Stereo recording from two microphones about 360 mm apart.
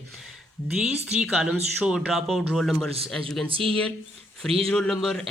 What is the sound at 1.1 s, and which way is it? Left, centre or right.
Speech, centre.